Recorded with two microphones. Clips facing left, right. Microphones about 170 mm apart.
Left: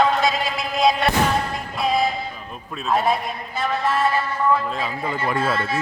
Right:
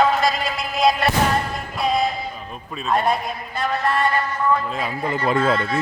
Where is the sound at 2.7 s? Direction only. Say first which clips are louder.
Even; centre (ahead or behind).